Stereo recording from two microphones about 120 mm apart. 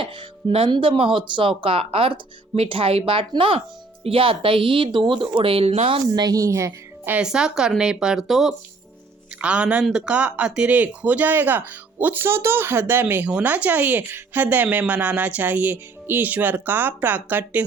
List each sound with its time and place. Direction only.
0.0 s a woman's voice: 45° right (ahead or behind)
6.1 s speech: 30° right (ahead or behind)
7.1 s speech: 5° right (ahead or behind)